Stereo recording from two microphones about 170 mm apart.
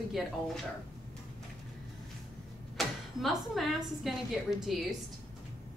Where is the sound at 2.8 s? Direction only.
Centre (ahead or behind).